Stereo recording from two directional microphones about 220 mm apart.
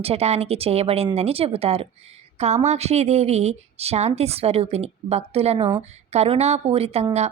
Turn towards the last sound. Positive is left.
turn(degrees=-30)  # may be behind; listen again after turning